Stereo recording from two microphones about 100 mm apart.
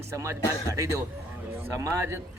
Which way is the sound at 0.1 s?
30° right (ahead or behind).